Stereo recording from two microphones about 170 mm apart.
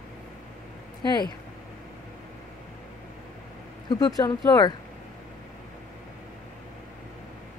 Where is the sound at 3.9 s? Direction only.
20° left (ahead or behind).